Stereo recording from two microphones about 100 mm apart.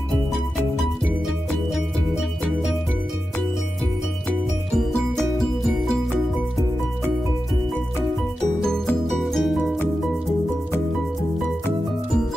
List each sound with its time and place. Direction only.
9.2 s music: centre (ahead or behind)